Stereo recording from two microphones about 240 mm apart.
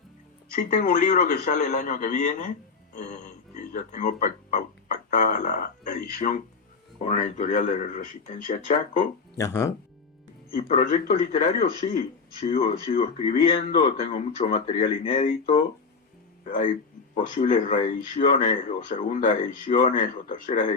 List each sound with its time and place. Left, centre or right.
0.5 s speech: left
9.4 s speech: centre
10.5 s a man's voice: left
13.0 s a man's voice: left
16.5 s speech: left